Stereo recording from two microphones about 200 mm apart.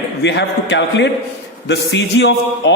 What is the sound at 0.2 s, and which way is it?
A man's voice, 60° left (ahead or behind).